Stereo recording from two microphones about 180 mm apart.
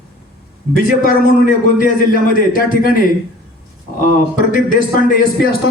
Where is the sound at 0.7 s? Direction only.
50° left (ahead or behind).